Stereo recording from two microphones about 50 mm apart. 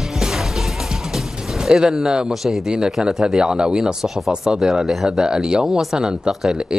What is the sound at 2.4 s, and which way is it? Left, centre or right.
A man's voice, centre.